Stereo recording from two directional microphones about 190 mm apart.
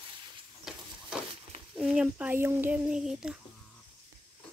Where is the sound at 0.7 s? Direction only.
Centre (ahead or behind).